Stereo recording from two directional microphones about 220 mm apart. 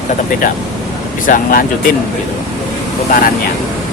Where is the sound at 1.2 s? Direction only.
40° left (ahead or behind).